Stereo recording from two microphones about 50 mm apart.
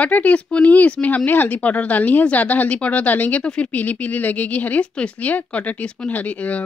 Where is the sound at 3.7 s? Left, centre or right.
Left.